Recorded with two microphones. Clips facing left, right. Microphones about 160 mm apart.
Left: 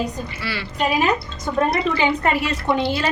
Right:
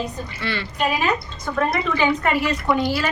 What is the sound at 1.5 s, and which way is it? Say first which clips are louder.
Speech: left 2 dB; 25° left (ahead or behind).